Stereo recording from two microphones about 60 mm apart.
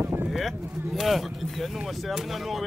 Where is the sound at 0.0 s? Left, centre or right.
Right.